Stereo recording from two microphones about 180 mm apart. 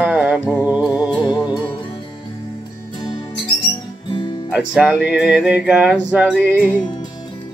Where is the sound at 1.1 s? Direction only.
25° left (ahead or behind).